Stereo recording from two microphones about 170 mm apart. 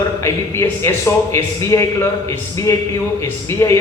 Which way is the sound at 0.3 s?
15° left (ahead or behind).